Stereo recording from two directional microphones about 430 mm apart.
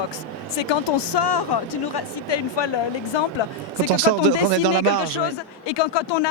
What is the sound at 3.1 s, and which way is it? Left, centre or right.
Speech, left.